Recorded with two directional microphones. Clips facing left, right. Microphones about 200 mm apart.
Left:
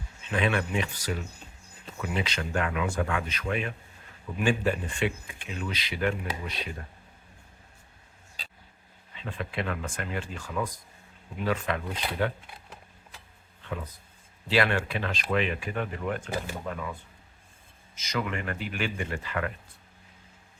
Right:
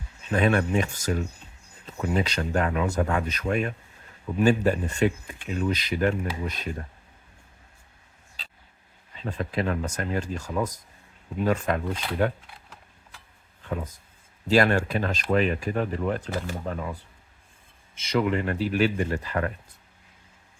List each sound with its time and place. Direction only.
0.2 s speech: 40° right (ahead or behind)
9.1 s speech: 40° right (ahead or behind)
14.4 s speech: 45° right (ahead or behind)